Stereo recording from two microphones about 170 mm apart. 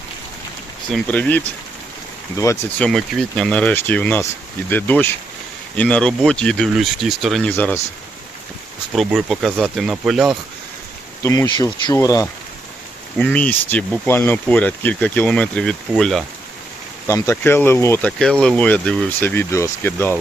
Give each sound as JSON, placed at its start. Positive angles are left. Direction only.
{"t": 0.9, "sound": "speech", "side_deg": 5}
{"t": 2.4, "sound": "speech", "side_deg": 20}
{"t": 2.8, "sound": "speech", "side_deg": 5}
{"t": 9.0, "sound": "speech", "side_deg": 0}
{"t": 11.2, "sound": "speech", "side_deg": 15}
{"t": 13.1, "sound": "speech", "side_deg": 10}
{"t": 17.1, "sound": "speech", "side_deg": 15}
{"t": 18.2, "sound": "speech", "side_deg": 5}